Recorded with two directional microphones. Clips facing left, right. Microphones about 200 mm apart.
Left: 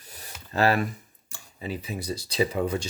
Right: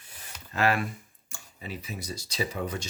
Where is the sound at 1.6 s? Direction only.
30° left (ahead or behind).